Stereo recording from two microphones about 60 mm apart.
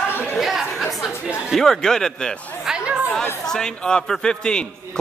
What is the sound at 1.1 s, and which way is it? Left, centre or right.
Speech, centre.